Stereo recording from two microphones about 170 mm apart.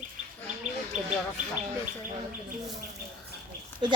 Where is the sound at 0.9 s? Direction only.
40° right (ahead or behind).